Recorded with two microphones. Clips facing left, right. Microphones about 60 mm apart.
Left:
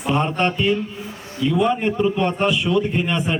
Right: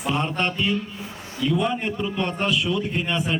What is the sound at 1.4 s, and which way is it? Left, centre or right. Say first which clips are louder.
A man's voice: left 4 dB; centre.